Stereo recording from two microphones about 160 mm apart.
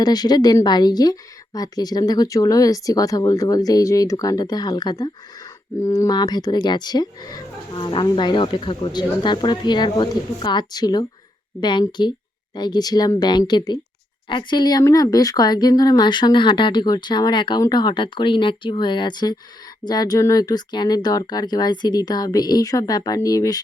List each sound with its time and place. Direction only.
0.0 s speech: 25° left (ahead or behind)